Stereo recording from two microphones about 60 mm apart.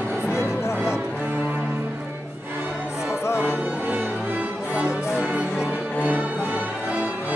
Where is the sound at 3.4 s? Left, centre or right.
Right.